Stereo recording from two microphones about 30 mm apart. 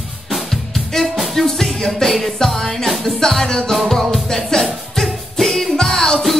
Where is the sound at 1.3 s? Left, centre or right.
Centre.